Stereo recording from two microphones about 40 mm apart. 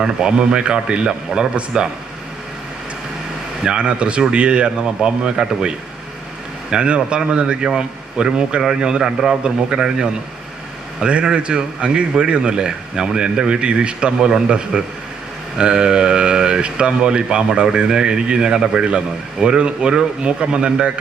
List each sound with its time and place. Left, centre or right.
0.0 s a man's voice: centre
3.8 s a man's voice: right